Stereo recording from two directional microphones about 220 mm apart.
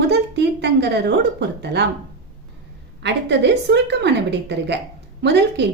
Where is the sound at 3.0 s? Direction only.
50° right (ahead or behind).